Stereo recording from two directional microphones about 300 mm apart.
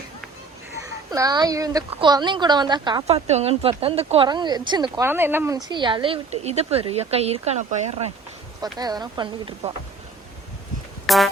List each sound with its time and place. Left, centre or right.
1.1 s a woman's voice: centre
11.0 s music: centre